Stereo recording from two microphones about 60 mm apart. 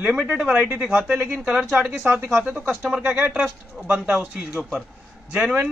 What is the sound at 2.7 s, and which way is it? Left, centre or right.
Speech, centre.